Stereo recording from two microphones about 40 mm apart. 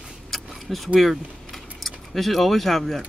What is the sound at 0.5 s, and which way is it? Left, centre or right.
Vehicle, centre.